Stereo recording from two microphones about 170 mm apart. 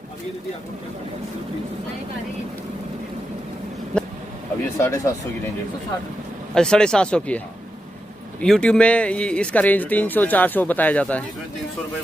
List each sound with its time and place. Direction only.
3.9 s vehicle: 5° left (ahead or behind)
4.7 s speech: 15° left (ahead or behind)
6.5 s speech: 5° left (ahead or behind)